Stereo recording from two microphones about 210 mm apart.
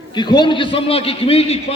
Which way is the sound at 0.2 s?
20° left (ahead or behind).